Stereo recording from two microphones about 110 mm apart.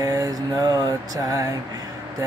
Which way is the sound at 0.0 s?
35° right (ahead or behind).